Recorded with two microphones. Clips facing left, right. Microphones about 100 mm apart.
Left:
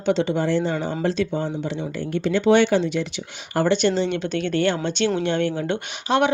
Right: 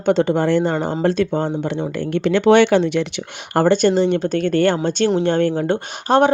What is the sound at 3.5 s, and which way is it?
Speech, 45° right (ahead or behind).